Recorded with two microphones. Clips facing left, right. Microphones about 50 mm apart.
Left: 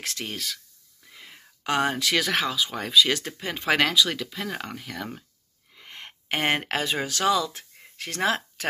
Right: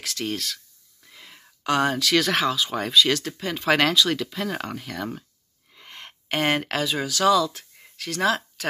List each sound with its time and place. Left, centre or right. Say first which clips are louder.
0.2 s speech: right 8 dB; centre
1.1 s a sound: even; centre
2.2 s speech: right 3 dB; centre
3.1 s speech: right 3 dB; left
3.7 s speech: right 2 dB; centre
5.9 s speech: even; centre